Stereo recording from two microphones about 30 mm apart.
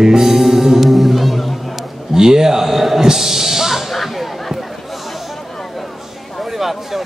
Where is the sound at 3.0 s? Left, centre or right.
Centre.